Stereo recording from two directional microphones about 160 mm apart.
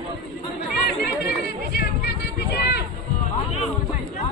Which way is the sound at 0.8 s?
90° left.